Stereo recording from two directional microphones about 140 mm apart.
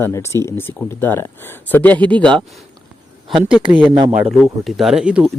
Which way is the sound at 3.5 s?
10° right (ahead or behind).